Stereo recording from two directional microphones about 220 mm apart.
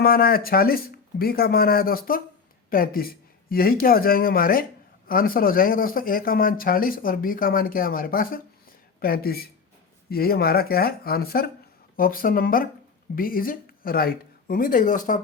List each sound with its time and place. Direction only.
0.0 s speech: 40° left (ahead or behind)